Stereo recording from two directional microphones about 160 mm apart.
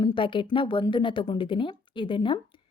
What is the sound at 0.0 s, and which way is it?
A woman's voice, 30° left (ahead or behind).